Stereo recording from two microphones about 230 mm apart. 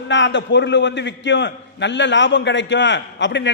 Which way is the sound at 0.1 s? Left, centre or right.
Left.